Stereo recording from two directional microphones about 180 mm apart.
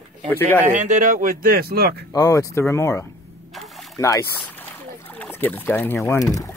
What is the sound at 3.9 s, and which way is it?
Speech, 20° left (ahead or behind).